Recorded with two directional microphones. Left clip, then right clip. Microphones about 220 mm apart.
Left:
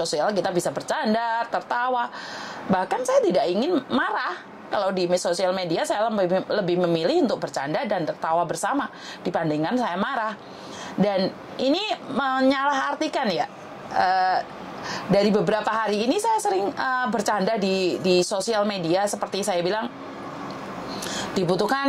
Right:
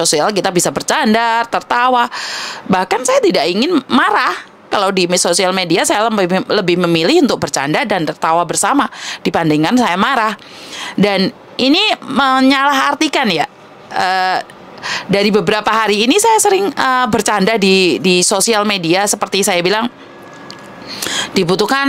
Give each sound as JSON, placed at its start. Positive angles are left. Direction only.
{"t": 0.0, "sound": "speech", "side_deg": -50}
{"t": 20.9, "sound": "speech", "side_deg": -40}